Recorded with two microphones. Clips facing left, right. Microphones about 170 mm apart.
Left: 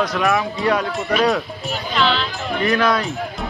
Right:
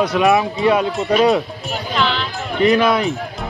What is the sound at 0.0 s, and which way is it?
Speech, 15° right (ahead or behind).